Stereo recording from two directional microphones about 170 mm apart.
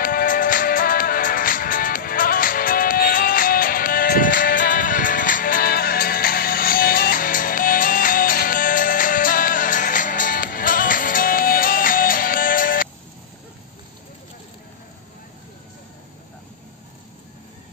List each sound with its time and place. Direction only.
0.0 s music: 55° left (ahead or behind)